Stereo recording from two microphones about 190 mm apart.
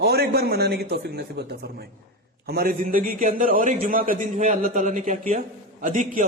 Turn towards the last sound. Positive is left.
turn(degrees=-40)  # may be behind; listen again after turning